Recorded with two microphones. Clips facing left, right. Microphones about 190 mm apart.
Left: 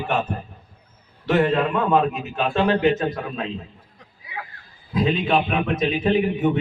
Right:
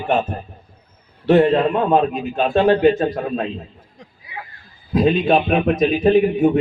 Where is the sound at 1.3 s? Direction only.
30° right (ahead or behind).